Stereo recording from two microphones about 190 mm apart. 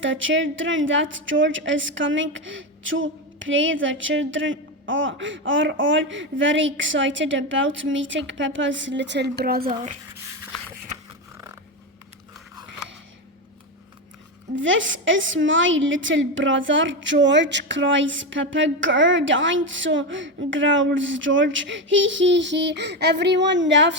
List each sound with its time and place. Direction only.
0.0 s a woman's voice: 85° right; by 9.6 s 55° right (ahead or behind)
9.6 s speech: 35° right (ahead or behind)
14.5 s a woman's voice: 80° right